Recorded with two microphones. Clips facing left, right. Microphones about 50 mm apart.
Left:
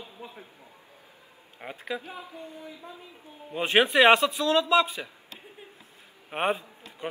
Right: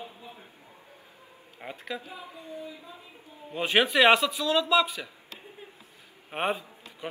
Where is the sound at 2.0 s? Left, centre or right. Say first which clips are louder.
Left 2 dB; left.